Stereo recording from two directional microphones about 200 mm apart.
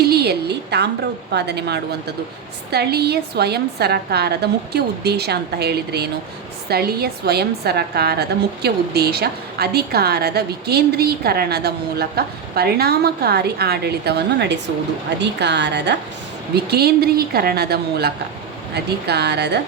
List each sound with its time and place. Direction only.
0.0 s a woman's voice: 55° right (ahead or behind)